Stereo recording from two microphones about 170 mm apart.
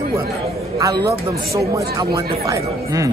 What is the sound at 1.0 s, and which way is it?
Speech, 20° right (ahead or behind).